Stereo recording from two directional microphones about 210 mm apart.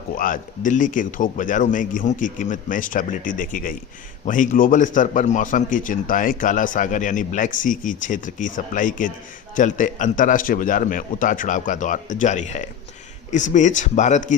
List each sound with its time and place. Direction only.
0.2 s a man's voice: 40° left (ahead or behind)